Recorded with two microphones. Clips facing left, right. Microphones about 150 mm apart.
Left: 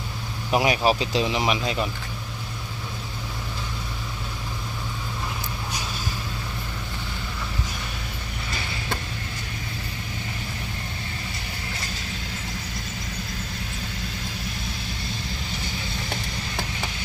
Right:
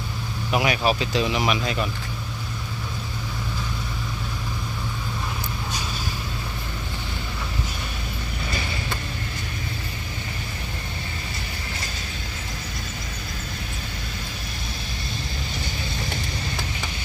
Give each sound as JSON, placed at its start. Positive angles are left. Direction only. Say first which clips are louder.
{"t": 0.5, "sound": "speech", "louder": "left 1 dB", "side_deg": 30}